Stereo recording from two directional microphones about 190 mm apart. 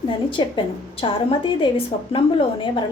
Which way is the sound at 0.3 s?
25° left (ahead or behind).